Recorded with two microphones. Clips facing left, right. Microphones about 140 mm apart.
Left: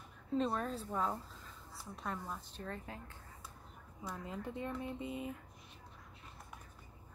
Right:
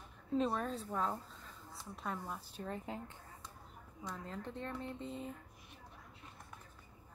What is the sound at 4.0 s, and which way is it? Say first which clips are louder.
Speech: left 1 dB; 10° left (ahead or behind).